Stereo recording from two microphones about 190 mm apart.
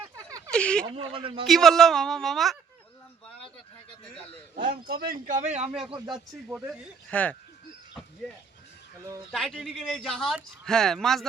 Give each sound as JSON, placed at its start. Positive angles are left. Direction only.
{"t": 0.3, "sound": "a sound", "side_deg": -20}
{"t": 0.5, "sound": "a sound", "side_deg": 5}
{"t": 0.9, "sound": "a man's voice", "side_deg": -30}
{"t": 1.5, "sound": "speech", "side_deg": 0}
{"t": 4.6, "sound": "speech", "side_deg": -50}
{"t": 5.8, "sound": "a man's voice", "side_deg": -25}
{"t": 7.1, "sound": "speech", "side_deg": 10}
{"t": 9.3, "sound": "speech", "side_deg": 5}